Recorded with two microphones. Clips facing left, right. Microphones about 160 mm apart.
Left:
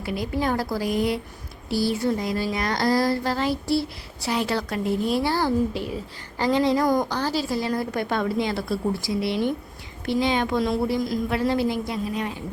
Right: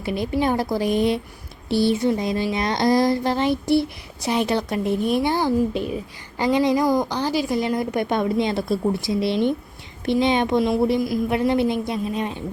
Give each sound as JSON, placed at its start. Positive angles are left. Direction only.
{"t": 0.0, "sound": "speech", "side_deg": -25}
{"t": 6.8, "sound": "speech", "side_deg": -5}